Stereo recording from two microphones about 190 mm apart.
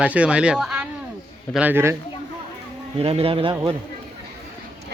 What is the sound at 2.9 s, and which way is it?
Speech, 30° right (ahead or behind).